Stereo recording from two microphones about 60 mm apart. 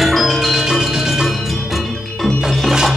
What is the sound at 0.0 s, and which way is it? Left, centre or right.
Music, centre.